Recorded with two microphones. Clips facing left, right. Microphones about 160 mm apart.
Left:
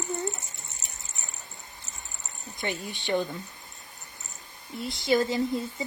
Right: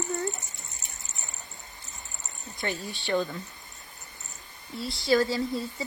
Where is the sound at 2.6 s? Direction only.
20° left (ahead or behind).